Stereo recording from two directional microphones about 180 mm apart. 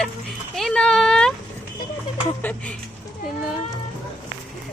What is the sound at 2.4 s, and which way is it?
Speech, 10° left (ahead or behind).